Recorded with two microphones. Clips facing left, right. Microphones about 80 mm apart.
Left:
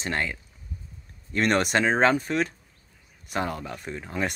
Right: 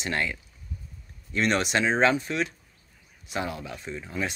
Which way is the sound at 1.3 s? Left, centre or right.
Left.